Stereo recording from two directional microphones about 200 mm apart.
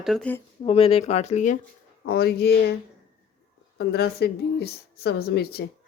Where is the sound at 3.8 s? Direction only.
55° left (ahead or behind).